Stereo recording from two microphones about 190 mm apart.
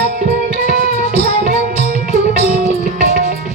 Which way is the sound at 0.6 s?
50° right (ahead or behind).